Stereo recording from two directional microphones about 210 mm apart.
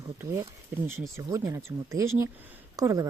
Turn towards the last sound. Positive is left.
turn(degrees=-15)  # may be behind; listen again after turning